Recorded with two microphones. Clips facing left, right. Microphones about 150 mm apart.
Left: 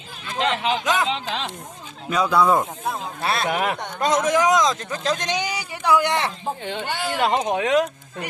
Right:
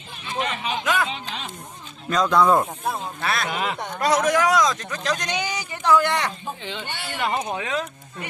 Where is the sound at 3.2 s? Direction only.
30° left (ahead or behind).